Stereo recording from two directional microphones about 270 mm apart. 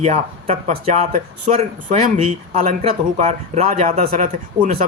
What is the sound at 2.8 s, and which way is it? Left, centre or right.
Speech, right.